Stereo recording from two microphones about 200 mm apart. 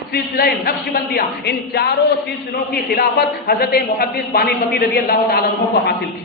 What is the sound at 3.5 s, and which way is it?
Speech, 50° left (ahead or behind).